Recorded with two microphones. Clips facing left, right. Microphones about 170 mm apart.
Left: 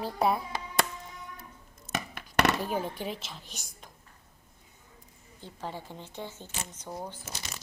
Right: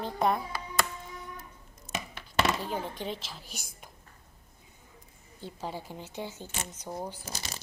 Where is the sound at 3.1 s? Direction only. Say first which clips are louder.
Even; centre (ahead or behind).